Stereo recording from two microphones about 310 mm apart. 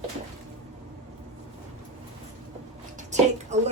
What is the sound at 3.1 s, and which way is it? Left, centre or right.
Speech, right.